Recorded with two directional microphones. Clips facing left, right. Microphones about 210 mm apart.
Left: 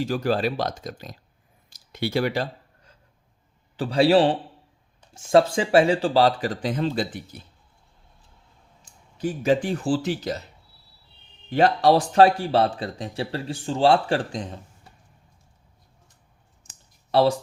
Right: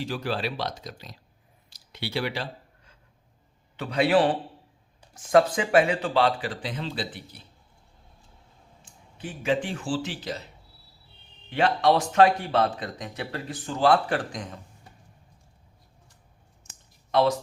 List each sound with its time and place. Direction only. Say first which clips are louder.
0.0 s speech: left 6 dB; 45° left (ahead or behind)
1.7 s a sound: left 6 dB; 45° left (ahead or behind)
3.8 s a man's voice: left 4 dB; 30° left (ahead or behind)
9.1 s speech: left 5 dB; 40° left (ahead or behind)
11.4 s speech: left 4 dB; 40° left (ahead or behind)
17.1 s speech: left 3 dB; 30° left (ahead or behind)